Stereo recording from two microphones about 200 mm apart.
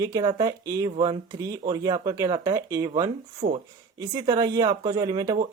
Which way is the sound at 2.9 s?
30° right (ahead or behind).